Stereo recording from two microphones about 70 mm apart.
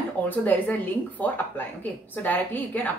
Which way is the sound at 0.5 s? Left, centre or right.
Left.